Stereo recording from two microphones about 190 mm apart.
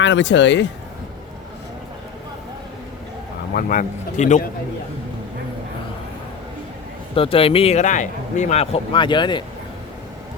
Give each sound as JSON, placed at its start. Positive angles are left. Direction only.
{"t": 0.0, "sound": "speech", "side_deg": 70}
{"t": 3.5, "sound": "speech", "side_deg": 50}
{"t": 7.2, "sound": "speech", "side_deg": 30}